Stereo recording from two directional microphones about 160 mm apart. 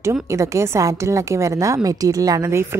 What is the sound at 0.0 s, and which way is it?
A woman's voice, 20° right (ahead or behind).